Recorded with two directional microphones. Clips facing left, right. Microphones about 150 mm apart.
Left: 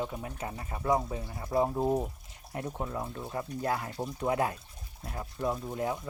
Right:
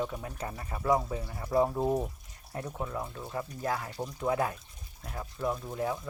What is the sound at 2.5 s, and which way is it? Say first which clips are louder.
Speech: left 1 dB; 20° left (ahead or behind).